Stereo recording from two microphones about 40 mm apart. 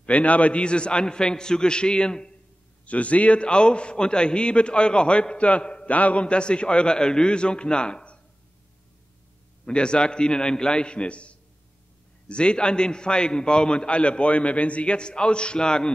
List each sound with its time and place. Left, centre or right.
0.0 s a man's voice: left
2.8 s a man's voice: left
9.7 s a man's voice: left